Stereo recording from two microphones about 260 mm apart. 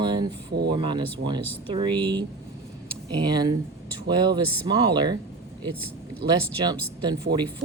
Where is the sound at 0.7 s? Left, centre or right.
Centre.